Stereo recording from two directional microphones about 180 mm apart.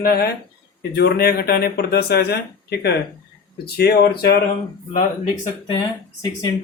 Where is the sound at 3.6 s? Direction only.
65° left (ahead or behind).